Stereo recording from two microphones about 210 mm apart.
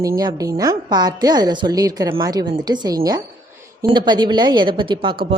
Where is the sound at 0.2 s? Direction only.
15° right (ahead or behind).